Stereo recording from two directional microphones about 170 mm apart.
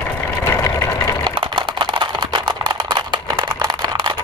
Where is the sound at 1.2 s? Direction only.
30° right (ahead or behind).